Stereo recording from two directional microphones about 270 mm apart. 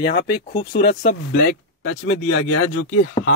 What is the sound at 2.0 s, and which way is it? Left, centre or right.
Speech, left.